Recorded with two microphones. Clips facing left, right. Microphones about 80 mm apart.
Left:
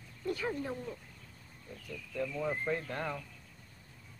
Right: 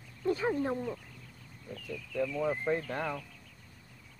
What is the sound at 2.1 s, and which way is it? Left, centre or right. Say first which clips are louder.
Speech: right 4 dB; right.